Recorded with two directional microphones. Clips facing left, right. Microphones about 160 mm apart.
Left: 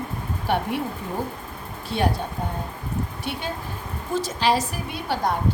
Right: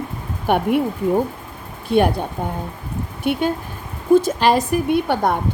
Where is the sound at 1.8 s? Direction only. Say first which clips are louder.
Right 8 dB; 55° right (ahead or behind).